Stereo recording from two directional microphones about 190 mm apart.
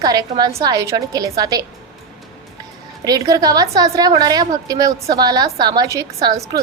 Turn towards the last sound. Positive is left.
turn(degrees=-15)  # may be behind; listen again after turning